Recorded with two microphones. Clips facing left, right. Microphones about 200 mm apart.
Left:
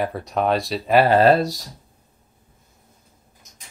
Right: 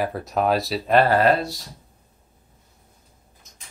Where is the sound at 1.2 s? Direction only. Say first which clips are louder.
Left 4 dB; 35° left (ahead or behind).